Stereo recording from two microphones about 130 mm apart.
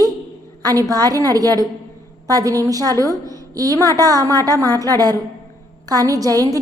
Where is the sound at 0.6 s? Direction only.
30° right (ahead or behind).